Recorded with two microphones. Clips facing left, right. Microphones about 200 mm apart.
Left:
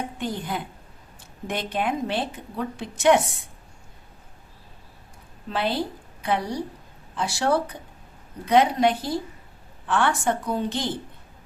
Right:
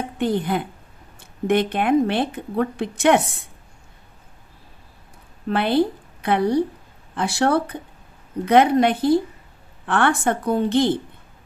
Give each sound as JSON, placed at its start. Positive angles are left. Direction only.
{"t": 0.2, "sound": "a woman's voice", "side_deg": -60}
{"t": 5.5, "sound": "a woman's voice", "side_deg": -60}